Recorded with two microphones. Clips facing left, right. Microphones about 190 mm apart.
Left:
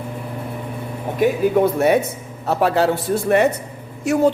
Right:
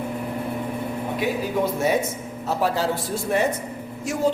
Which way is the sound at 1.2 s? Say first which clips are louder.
Left 9 dB; 60° left (ahead or behind).